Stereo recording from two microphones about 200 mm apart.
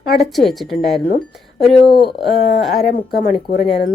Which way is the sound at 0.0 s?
45° left (ahead or behind).